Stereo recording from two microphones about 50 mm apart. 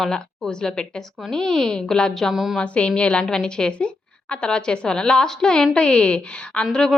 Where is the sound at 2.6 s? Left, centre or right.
Left.